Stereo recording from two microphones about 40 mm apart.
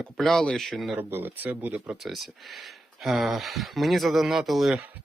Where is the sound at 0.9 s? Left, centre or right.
Right.